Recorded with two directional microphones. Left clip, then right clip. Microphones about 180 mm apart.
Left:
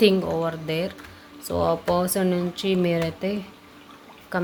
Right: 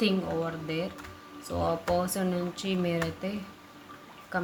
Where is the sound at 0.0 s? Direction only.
50° left (ahead or behind).